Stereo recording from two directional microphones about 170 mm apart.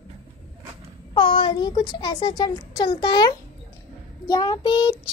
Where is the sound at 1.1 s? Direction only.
30° left (ahead or behind).